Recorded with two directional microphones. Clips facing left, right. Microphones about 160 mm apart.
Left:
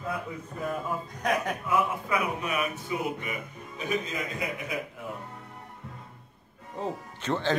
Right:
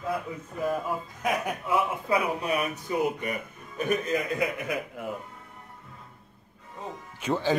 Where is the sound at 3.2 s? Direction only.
50° right (ahead or behind).